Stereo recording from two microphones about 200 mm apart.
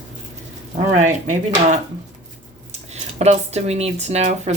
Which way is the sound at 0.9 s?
35° right (ahead or behind).